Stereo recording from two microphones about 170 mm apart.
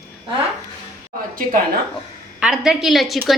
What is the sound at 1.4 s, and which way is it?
Speech, 55° right (ahead or behind).